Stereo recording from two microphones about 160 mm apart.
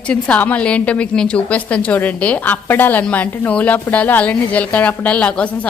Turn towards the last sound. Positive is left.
turn(degrees=10)  # may be behind; listen again after turning